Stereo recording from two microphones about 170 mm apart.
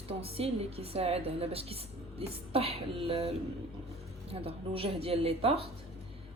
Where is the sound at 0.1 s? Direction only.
35° right (ahead or behind).